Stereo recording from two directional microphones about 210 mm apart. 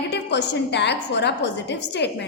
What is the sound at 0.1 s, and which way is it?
A woman's voice, 55° left (ahead or behind).